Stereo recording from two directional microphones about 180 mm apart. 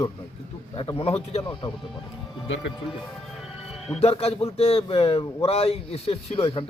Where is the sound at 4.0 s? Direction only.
35° left (ahead or behind).